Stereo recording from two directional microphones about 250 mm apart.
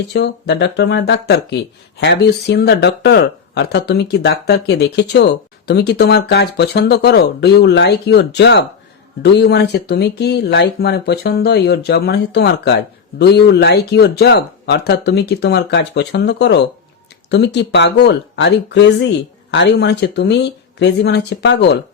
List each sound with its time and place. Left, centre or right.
0.1 s speech: left